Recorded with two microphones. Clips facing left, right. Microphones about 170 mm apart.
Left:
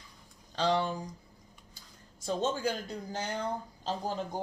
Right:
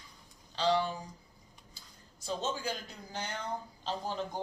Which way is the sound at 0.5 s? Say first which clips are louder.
Left 1 dB; 45° left (ahead or behind).